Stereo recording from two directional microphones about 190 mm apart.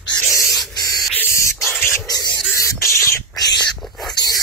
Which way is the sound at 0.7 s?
20° left (ahead or behind).